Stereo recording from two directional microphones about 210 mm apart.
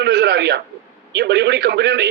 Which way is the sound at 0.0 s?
55° right (ahead or behind).